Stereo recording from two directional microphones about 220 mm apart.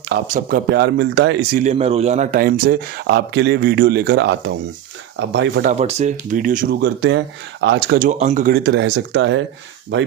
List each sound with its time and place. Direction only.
0.1 s speech: 45° right (ahead or behind)
1.5 s speech: 30° right (ahead or behind); by 5.7 s 50° right (ahead or behind)
5.7 s speech: 30° right (ahead or behind); by 7.9 s 55° right (ahead or behind)
7.9 s speech: 35° right (ahead or behind); by 9.4 s 55° right (ahead or behind)